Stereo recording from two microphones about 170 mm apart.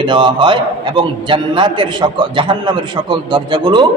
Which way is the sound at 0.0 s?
30° right (ahead or behind).